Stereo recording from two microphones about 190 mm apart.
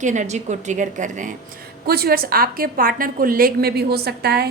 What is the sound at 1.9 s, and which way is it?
A woman's voice, 55° right (ahead or behind).